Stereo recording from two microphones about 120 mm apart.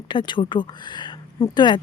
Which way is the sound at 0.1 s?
40° left (ahead or behind).